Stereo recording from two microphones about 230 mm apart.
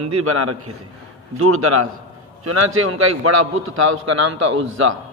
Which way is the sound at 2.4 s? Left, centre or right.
Right.